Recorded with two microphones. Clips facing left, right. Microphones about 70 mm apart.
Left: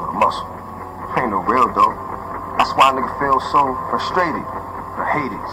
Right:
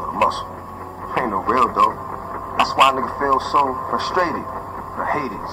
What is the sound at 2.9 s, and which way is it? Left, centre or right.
Speech, left.